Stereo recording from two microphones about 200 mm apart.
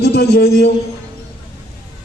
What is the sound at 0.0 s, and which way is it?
Speech, 50° left (ahead or behind).